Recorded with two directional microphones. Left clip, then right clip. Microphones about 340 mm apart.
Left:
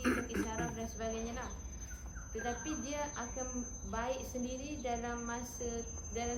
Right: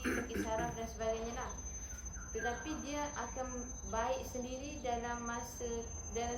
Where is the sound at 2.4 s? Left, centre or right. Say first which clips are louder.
Even; centre.